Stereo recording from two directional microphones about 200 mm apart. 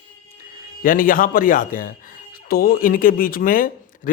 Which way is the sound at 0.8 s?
45° left (ahead or behind).